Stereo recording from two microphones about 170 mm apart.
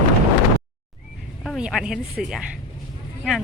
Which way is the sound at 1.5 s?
5° right (ahead or behind).